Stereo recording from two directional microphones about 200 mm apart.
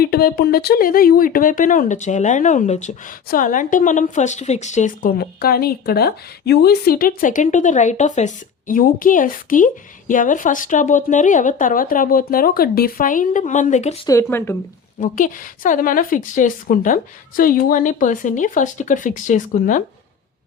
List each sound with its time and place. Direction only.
0.0 s a woman's voice: 50° left (ahead or behind)
14.1 s speech: 15° left (ahead or behind)
15.0 s a woman's voice: 40° left (ahead or behind)